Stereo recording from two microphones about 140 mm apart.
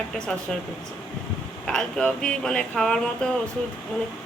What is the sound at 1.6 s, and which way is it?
Speech, 5° left (ahead or behind).